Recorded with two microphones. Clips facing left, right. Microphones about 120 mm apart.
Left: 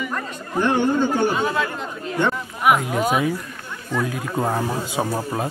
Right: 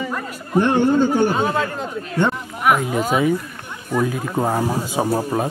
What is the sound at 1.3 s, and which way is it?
Speech, 35° right (ahead or behind).